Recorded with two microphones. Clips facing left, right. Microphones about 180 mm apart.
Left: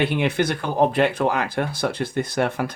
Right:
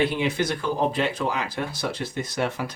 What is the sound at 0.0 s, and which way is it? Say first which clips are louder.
Speech: left 2 dB; 60° left (ahead or behind).